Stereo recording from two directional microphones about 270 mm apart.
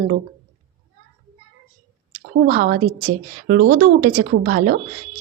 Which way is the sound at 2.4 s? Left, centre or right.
Right.